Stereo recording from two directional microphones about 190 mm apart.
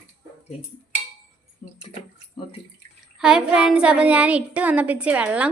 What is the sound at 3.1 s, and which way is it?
A child's voice, 5° right (ahead or behind).